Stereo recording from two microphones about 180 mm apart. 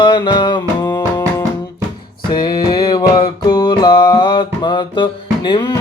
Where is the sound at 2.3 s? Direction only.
25° left (ahead or behind).